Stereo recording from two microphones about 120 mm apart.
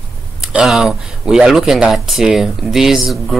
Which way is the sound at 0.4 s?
5° right (ahead or behind).